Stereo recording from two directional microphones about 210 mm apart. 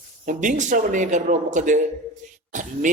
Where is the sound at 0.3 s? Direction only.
35° right (ahead or behind).